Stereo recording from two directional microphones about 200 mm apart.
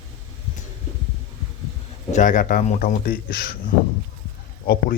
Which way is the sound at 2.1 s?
40° left (ahead or behind).